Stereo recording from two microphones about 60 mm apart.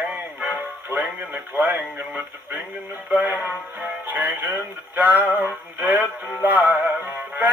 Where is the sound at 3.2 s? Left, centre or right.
Right.